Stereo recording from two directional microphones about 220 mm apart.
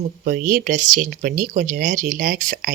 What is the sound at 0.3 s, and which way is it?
Speech, 40° right (ahead or behind).